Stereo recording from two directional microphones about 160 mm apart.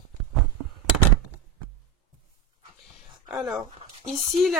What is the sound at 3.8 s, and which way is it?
Speech, 40° right (ahead or behind).